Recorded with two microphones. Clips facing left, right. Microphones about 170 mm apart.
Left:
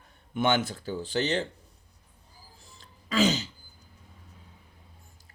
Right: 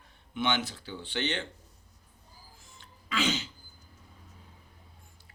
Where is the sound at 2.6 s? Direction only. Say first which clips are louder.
Left 1 dB; 40° left (ahead or behind).